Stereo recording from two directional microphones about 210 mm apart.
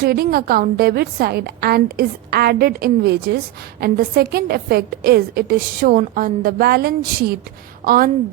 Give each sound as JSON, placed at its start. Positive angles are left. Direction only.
{"t": 0.0, "sound": "a woman's voice", "side_deg": -45}